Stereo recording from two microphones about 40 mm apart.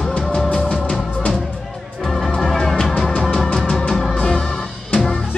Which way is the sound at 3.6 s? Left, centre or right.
Centre.